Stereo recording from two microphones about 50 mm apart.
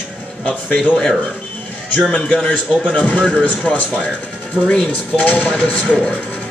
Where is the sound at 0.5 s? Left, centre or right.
Left.